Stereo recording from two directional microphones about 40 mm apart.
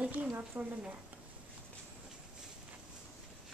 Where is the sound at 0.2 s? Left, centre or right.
Right.